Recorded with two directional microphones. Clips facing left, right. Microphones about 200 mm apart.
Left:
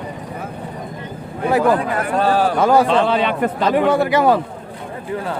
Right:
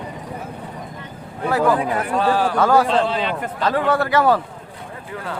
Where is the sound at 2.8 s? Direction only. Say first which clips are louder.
Left 3 dB; 70° left (ahead or behind).